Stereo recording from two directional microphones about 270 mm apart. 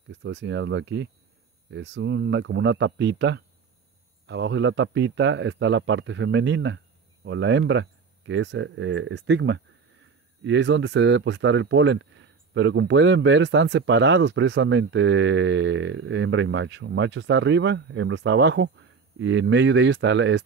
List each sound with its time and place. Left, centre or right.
0.1 s speech: right